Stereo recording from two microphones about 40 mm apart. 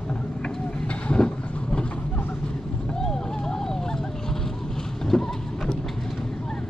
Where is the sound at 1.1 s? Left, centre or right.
Left.